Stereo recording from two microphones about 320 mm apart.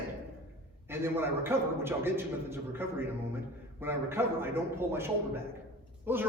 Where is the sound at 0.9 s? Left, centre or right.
Centre.